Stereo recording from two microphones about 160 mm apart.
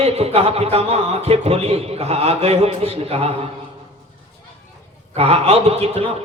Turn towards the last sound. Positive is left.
turn(degrees=-40)  # may be behind; listen again after turning